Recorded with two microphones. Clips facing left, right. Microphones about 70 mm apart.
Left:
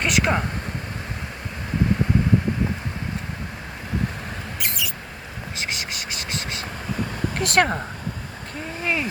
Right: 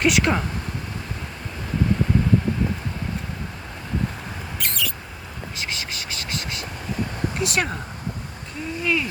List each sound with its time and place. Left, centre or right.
0.0 s speech: centre
4.6 s mouse: centre
7.3 s speech: left
8.8 s vehicle: left